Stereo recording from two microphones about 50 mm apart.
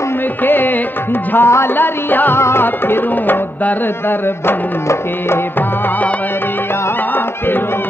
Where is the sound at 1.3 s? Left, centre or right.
Left.